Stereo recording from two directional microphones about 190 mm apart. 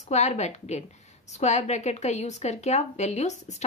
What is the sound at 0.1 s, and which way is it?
A woman's voice, 35° left (ahead or behind).